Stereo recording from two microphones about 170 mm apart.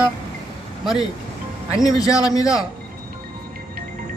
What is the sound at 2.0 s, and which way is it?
Speech, 20° left (ahead or behind).